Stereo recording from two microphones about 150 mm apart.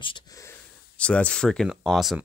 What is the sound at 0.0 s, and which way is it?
Wheeze, 35° left (ahead or behind).